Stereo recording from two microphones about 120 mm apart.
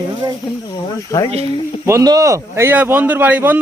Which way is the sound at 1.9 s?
30° right (ahead or behind).